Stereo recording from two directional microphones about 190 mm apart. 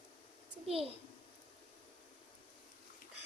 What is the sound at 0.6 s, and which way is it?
Speech, 30° right (ahead or behind).